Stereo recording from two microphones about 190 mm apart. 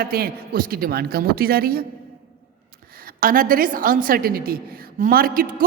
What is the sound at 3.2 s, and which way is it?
A man's voice, 50° right (ahead or behind).